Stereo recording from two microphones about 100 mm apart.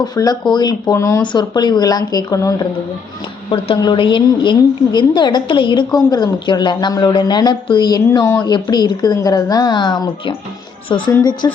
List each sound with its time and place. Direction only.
0.0 s a woman's voice: 40° left (ahead or behind)
0.9 s speech: 30° left (ahead or behind)
1.2 s speech: 50° left (ahead or behind)
3.8 s a woman's voice: 50° left (ahead or behind)